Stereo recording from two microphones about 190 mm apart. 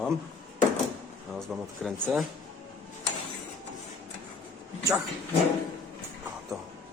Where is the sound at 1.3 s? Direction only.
Centre (ahead or behind).